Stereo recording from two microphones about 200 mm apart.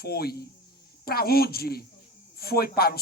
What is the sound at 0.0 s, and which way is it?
Speech, 50° left (ahead or behind).